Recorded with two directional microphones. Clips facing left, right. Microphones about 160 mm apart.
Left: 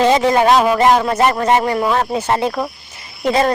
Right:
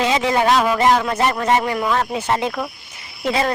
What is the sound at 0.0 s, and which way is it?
Speech, 45° left (ahead or behind).